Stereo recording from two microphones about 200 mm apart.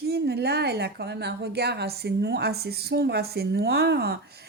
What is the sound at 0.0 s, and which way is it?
A woman's voice, 55° right (ahead or behind).